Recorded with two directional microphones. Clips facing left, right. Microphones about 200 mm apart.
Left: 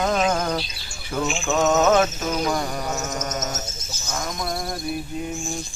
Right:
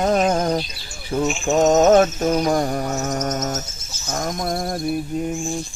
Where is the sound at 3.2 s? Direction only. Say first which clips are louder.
Right 5 dB; 50° right (ahead or behind).